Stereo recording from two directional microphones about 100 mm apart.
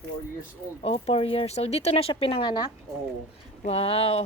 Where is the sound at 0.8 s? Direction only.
90° left; by 2.7 s 50° left (ahead or behind).